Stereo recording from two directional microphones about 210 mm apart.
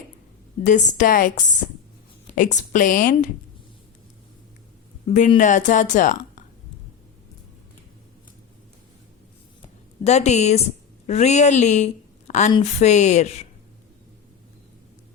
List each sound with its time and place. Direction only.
0.6 s speech: 35° left (ahead or behind)
5.0 s speech: 35° left (ahead or behind)
9.6 s a woman's voice: 30° left (ahead or behind)